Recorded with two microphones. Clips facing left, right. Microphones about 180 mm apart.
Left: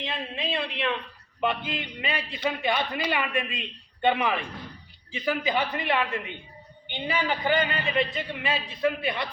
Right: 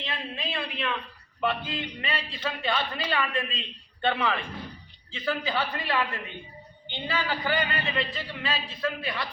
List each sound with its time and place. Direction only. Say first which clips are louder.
0.0 s a man's voice: left 3 dB; 20° left (ahead or behind)